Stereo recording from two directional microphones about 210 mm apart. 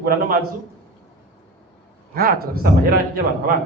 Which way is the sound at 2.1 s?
45° right (ahead or behind).